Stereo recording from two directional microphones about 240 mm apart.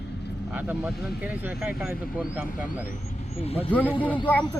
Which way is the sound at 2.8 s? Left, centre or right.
Left.